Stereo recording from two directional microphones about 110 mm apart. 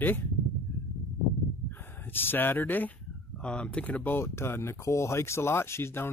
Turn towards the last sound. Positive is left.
turn(degrees=20)  # may be behind; listen again after turning